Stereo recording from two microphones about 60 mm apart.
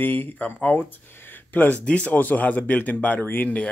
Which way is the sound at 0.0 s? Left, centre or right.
Left.